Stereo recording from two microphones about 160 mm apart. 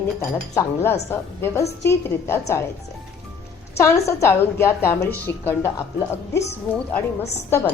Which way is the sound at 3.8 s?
20° left (ahead or behind).